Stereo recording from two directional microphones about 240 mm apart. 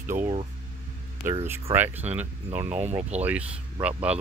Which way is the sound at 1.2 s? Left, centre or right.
Centre.